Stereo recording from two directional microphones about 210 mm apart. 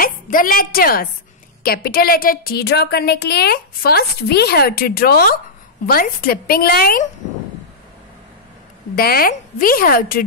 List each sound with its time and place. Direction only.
0.0 s a woman's voice: 40° left (ahead or behind)
8.9 s a woman's voice: 45° left (ahead or behind)